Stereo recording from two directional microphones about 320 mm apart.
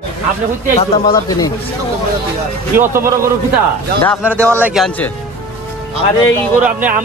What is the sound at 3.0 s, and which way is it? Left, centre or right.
Speech, centre.